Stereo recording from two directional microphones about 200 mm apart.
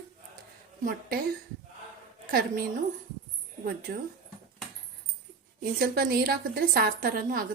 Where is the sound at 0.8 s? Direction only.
45° right (ahead or behind).